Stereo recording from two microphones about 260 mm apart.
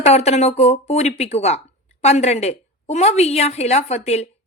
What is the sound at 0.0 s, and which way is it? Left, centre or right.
Speech, left.